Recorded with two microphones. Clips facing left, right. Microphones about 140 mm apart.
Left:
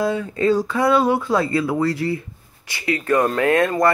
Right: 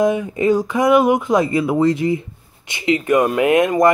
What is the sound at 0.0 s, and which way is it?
Speech, 15° right (ahead or behind).